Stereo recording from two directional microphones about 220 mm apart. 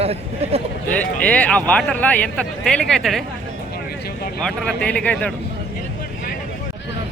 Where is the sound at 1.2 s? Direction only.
5° left (ahead or behind).